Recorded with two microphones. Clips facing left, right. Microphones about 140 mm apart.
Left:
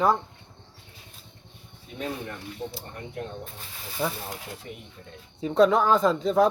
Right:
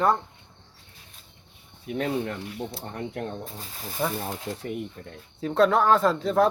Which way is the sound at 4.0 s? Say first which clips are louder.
Right 1 dB; 20° right (ahead or behind).